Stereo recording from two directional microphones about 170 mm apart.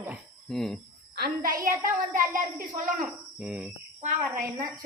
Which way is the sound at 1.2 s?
55° right (ahead or behind).